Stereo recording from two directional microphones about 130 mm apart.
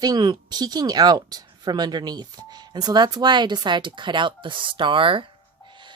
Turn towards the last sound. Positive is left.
turn(degrees=-35)  # may be behind; listen again after turning